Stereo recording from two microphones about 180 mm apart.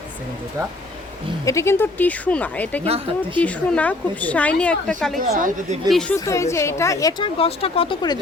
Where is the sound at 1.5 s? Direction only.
15° left (ahead or behind).